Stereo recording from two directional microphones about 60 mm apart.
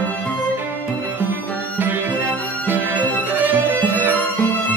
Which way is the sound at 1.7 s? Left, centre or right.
Right.